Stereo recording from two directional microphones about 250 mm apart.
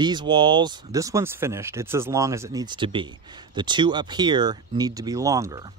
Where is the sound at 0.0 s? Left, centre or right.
Centre.